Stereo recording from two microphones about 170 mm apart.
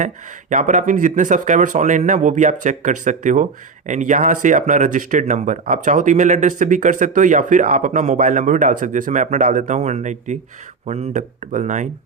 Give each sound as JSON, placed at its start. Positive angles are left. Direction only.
{"t": 0.5, "sound": "speech", "side_deg": -45}